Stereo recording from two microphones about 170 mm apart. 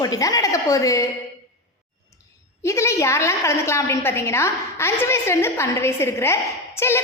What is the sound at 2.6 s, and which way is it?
A woman's voice, 15° left (ahead or behind).